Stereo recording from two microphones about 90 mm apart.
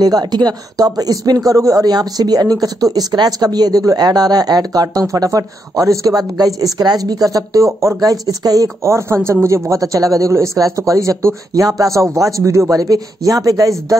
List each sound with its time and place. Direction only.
0.0 s speech: 50° right (ahead or behind)